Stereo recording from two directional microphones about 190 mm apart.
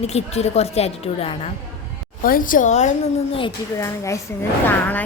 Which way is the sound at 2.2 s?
45° left (ahead or behind).